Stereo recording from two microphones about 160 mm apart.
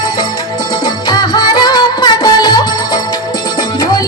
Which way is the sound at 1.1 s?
25° left (ahead or behind).